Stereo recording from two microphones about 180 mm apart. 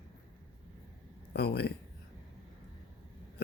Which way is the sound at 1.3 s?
65° left (ahead or behind).